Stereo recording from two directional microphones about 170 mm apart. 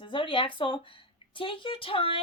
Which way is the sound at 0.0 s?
30° left (ahead or behind).